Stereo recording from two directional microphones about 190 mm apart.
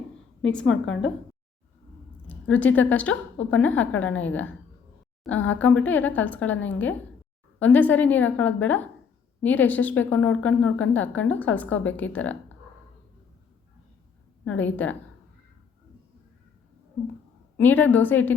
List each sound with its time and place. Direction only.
0.6 s a woman's voice: 80° left
2.2 s a woman's voice: 10° left (ahead or behind)
14.4 s a woman's voice: 10° left (ahead or behind)
17.6 s a woman's voice: 10° left (ahead or behind)